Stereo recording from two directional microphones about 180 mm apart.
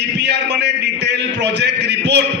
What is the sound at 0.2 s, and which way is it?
A man's voice, 70° right (ahead or behind).